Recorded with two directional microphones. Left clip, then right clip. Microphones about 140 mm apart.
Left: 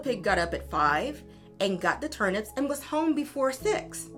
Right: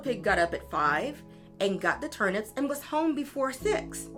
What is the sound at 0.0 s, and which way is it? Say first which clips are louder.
A woman's voice: even; 45° left (ahead or behind).